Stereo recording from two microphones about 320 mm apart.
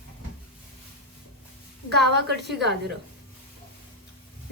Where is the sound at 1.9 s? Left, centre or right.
Right.